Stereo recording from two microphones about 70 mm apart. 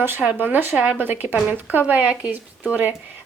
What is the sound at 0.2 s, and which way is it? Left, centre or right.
Speech, right.